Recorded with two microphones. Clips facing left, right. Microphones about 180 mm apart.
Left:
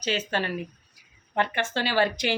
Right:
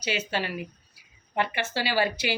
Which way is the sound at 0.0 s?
10° right (ahead or behind).